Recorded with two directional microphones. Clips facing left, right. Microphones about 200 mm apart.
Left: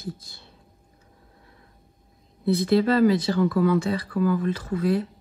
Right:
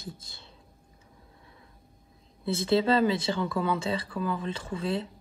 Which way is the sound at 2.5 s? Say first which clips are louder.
Left 3 dB; 25° right (ahead or behind).